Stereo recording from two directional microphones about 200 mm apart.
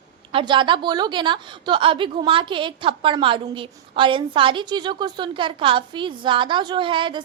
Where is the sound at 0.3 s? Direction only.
25° right (ahead or behind).